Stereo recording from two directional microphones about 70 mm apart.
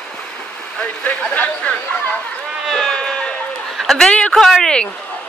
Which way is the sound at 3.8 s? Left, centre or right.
Centre.